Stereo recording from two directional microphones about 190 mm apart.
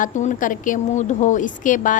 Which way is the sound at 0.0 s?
40° left (ahead or behind).